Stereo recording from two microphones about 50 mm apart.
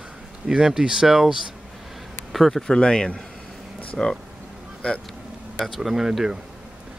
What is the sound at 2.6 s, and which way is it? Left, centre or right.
Speech, centre.